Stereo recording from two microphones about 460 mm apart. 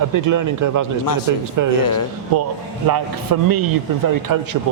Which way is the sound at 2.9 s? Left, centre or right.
Right.